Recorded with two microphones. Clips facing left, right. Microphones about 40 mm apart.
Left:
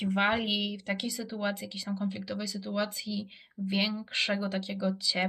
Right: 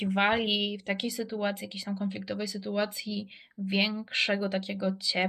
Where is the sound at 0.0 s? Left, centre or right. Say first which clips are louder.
Right 2 dB; centre.